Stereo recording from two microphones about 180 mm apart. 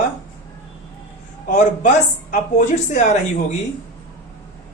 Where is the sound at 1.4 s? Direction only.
45° left (ahead or behind).